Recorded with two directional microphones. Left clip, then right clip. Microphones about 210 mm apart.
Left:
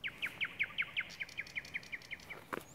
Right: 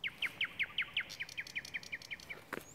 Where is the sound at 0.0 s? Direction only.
45° right (ahead or behind).